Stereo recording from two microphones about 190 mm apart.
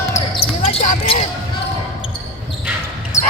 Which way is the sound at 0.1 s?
35° left (ahead or behind).